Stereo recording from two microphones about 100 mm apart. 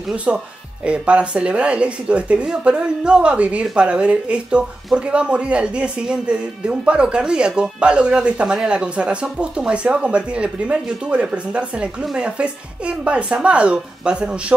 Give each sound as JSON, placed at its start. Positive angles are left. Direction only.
{"t": 0.1, "sound": "speech", "side_deg": -10}